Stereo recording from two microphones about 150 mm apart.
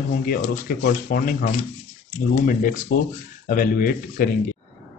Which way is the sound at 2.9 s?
65° left (ahead or behind).